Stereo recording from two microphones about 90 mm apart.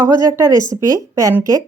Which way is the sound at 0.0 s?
35° right (ahead or behind).